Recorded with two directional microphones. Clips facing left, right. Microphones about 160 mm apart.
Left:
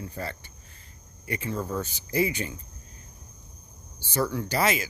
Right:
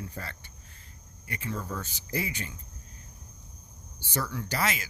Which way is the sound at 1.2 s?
20° left (ahead or behind).